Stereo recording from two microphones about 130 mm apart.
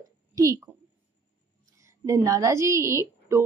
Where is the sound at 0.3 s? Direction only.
25° right (ahead or behind).